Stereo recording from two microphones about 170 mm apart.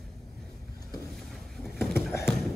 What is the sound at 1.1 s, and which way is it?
Boat, centre (ahead or behind).